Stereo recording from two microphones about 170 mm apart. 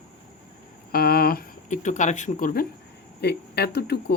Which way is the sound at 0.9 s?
60° left (ahead or behind).